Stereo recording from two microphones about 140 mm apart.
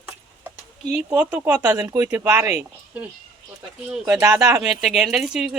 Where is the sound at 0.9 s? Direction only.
10° right (ahead or behind).